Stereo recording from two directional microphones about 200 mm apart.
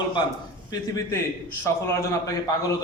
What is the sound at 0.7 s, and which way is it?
Speech, 15° left (ahead or behind).